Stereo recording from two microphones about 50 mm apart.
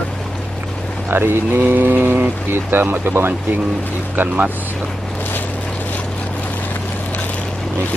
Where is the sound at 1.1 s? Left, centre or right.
Right.